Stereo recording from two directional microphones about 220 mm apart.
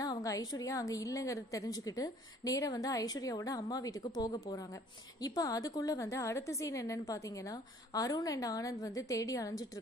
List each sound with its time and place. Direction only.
0.0 s a woman's voice: 15° left (ahead or behind)